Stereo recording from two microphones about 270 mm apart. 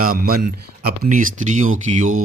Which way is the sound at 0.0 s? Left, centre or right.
Right.